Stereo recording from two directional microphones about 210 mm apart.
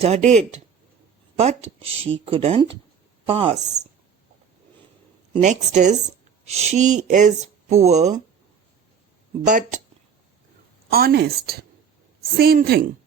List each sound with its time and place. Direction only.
0.0 s speech: 30° right (ahead or behind)
5.4 s speech: 35° right (ahead or behind)
9.5 s speech: 35° right (ahead or behind)
10.9 s a woman's voice: 50° right (ahead or behind)